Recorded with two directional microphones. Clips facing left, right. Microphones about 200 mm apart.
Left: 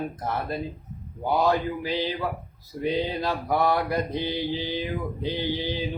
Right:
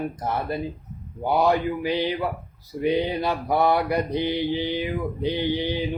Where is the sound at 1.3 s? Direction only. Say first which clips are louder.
Right 2 dB; 15° right (ahead or behind).